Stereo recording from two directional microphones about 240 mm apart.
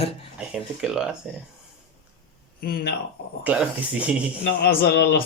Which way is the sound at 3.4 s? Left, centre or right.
Centre.